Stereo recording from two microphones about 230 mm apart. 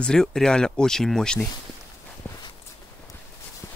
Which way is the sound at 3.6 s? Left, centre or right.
Centre.